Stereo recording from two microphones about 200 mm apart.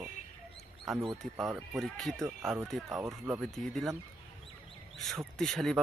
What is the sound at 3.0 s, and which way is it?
Speech, 15° right (ahead or behind).